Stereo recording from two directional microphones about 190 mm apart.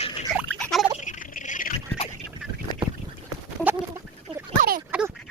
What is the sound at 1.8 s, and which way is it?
Duck, 25° left (ahead or behind).